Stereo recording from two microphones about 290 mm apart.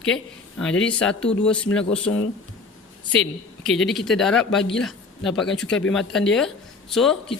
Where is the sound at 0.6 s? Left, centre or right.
Centre.